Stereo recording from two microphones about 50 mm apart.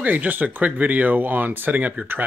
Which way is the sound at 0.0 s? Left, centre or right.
Right.